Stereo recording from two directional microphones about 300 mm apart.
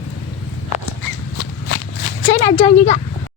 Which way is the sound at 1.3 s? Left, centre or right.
Left.